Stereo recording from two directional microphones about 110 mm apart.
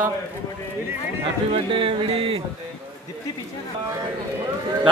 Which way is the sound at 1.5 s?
55° right (ahead or behind).